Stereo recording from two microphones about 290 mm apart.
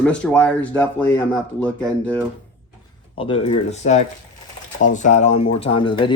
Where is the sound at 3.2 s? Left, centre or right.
Centre.